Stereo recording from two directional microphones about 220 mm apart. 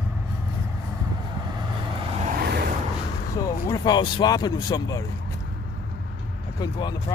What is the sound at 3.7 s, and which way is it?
Speech, 20° left (ahead or behind).